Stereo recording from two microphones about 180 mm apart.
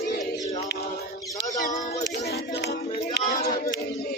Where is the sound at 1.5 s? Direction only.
45° left (ahead or behind).